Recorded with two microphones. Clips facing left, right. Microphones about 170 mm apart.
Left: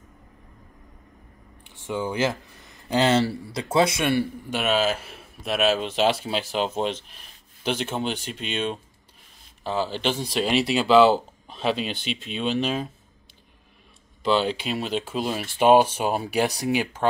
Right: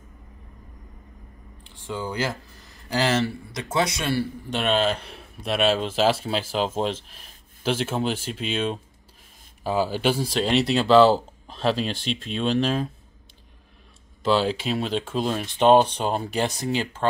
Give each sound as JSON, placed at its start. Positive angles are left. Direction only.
{"t": 1.9, "sound": "speech", "side_deg": 20}
{"t": 4.5, "sound": "speech", "side_deg": 5}
{"t": 14.2, "sound": "speech", "side_deg": 0}